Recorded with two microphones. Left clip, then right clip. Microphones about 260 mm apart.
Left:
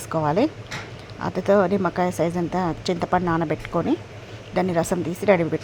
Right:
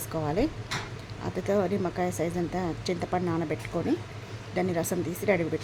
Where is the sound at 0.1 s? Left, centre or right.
Centre.